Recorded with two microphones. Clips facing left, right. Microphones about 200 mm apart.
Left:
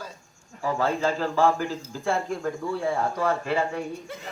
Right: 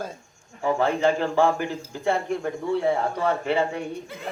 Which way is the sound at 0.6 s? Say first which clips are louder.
Right 3 dB; 25° right (ahead or behind).